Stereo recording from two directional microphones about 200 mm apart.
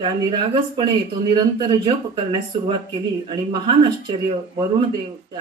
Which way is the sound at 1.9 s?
25° right (ahead or behind).